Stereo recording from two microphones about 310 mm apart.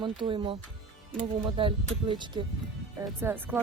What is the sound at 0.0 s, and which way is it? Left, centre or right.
Speech, centre.